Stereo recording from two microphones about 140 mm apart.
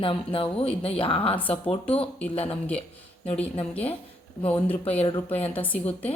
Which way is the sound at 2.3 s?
45° left (ahead or behind).